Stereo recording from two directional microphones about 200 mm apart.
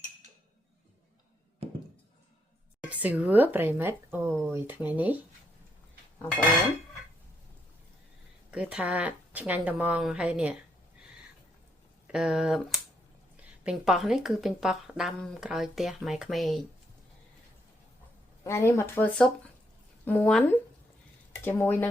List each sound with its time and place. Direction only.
2.9 s speech: 5° right (ahead or behind)
8.4 s speech: 5° right (ahead or behind)
12.0 s speech: 5° right (ahead or behind)
18.4 s speech: 15° left (ahead or behind)
21.4 s speech: 10° left (ahead or behind)